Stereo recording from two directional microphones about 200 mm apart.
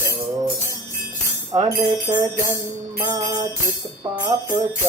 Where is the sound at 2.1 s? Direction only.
20° right (ahead or behind).